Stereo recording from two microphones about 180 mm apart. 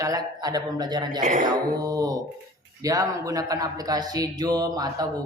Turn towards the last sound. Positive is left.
turn(degrees=-20)  # may be behind; listen again after turning